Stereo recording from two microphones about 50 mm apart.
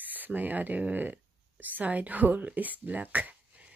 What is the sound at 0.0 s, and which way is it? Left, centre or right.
Speech, right.